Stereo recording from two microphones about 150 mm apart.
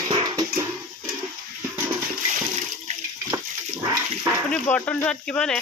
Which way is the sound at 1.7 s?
15° right (ahead or behind).